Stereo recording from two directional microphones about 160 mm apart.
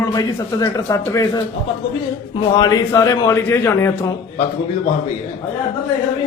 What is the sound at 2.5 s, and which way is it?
Speech, 20° left (ahead or behind).